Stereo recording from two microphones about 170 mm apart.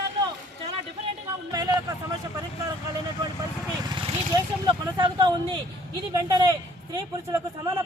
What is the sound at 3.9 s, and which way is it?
Vehicle, 25° right (ahead or behind).